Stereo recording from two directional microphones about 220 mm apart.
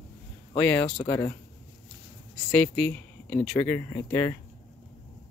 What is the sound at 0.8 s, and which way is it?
Speech, 25° left (ahead or behind).